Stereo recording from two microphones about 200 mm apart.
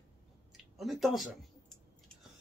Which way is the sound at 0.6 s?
Centre (ahead or behind).